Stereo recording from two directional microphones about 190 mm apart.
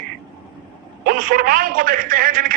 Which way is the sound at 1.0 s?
50° right (ahead or behind).